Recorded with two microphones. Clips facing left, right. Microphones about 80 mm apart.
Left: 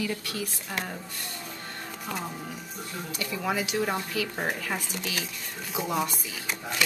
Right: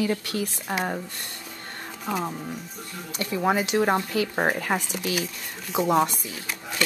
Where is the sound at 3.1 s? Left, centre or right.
Right.